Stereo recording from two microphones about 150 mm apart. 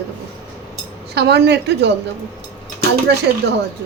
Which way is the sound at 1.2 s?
90° right.